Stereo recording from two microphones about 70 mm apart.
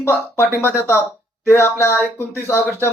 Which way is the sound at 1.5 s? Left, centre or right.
Left.